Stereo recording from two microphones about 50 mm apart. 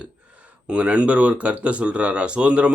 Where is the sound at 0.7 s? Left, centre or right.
Right.